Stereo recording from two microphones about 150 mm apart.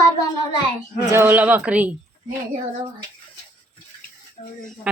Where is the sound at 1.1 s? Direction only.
15° right (ahead or behind).